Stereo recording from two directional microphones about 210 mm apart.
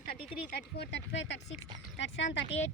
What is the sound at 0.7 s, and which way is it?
Speech, 55° left (ahead or behind).